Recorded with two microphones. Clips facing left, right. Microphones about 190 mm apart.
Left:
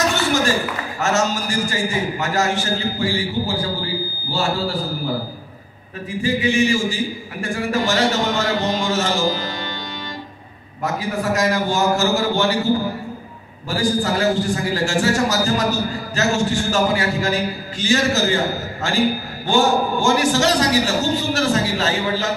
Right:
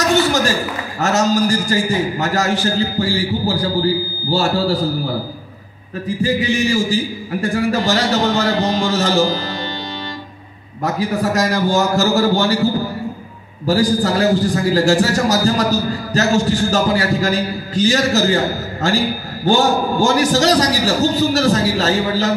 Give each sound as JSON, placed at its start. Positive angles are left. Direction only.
{"t": 1.0, "sound": "a man's voice", "side_deg": -40}
{"t": 6.0, "sound": "a man's voice", "side_deg": -40}
{"t": 10.8, "sound": "a man's voice", "side_deg": -40}
{"t": 13.7, "sound": "a man's voice", "side_deg": -40}